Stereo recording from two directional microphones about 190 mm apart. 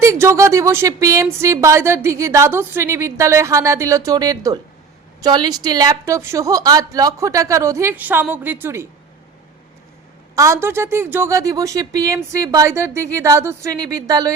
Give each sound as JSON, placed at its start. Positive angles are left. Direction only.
{"t": 0.0, "sound": "a woman's voice", "side_deg": -15}
{"t": 10.3, "sound": "a woman's voice", "side_deg": -15}